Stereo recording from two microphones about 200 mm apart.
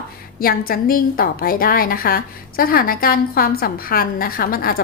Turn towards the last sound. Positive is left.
turn(degrees=45)  # may be behind; listen again after turning